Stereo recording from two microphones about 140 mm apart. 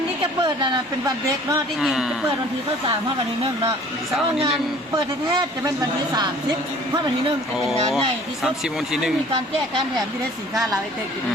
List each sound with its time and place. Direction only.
0.4 s speech: 30° right (ahead or behind)
1.8 s speech: 5° right (ahead or behind)
4.9 s a man's voice: 25° right (ahead or behind)
7.7 s speech: centre (ahead or behind)